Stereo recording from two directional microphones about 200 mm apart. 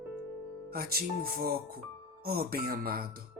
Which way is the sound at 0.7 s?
50° right (ahead or behind).